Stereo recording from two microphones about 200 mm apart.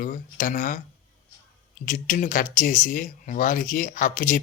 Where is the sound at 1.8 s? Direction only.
40° left (ahead or behind).